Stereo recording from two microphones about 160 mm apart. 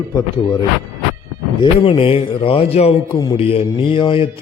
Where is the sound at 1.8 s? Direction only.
35° left (ahead or behind).